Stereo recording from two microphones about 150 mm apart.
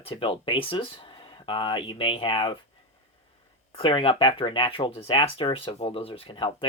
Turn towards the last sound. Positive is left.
turn(degrees=35)  # may be behind; listen again after turning